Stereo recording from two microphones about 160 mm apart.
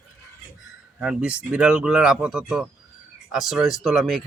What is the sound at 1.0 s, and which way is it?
Speech, 5° right (ahead or behind).